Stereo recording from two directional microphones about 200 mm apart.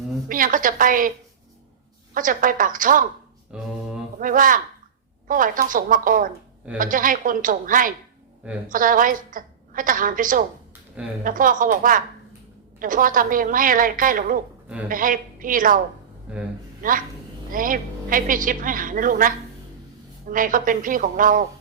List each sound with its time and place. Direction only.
0.3 s a woman's voice: 45° right (ahead or behind)
2.1 s a woman's voice: 45° right (ahead or behind)
3.5 s mantra: 5° right (ahead or behind)
4.2 s a woman's voice: 45° right (ahead or behind)
16.3 s a man's voice: 5° right (ahead or behind)
16.8 s a woman's voice: 40° right (ahead or behind)